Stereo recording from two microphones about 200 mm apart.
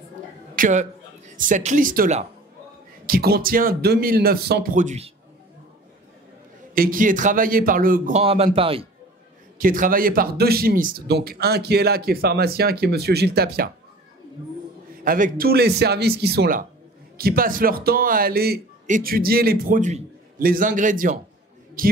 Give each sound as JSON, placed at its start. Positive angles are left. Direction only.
{"t": 0.6, "sound": "a man's voice", "side_deg": -40}
{"t": 3.1, "sound": "speech", "side_deg": -50}
{"t": 6.7, "sound": "speech", "side_deg": -45}
{"t": 8.2, "sound": "a man's voice", "side_deg": -30}
{"t": 9.6, "sound": "speech", "side_deg": -45}
{"t": 15.0, "sound": "speech", "side_deg": -45}